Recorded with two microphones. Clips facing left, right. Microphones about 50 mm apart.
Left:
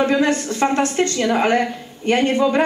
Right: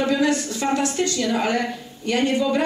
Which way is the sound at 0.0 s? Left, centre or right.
Left.